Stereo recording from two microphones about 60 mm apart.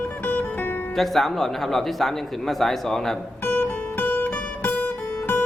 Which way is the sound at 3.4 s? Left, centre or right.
Left.